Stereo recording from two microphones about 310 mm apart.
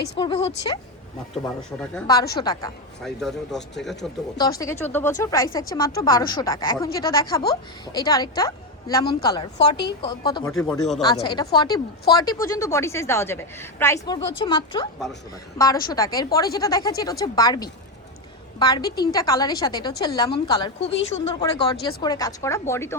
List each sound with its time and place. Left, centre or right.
0.2 s a woman's voice: centre
1.8 s a woman's voice: centre
4.4 s a woman's voice: centre
9.6 s a woman's voice: left
10.0 s a woman's voice: centre
10.6 s a man's voice: centre
11.0 s a woman's voice: centre